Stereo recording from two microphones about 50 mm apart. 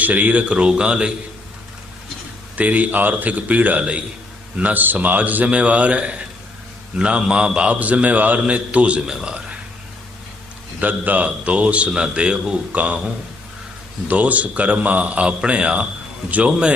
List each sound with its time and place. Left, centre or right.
0.0 s a man's voice: right
2.6 s a man's voice: right
9.0 s a man's voice: centre
10.8 s a man's voice: right
14.1 s a man's voice: right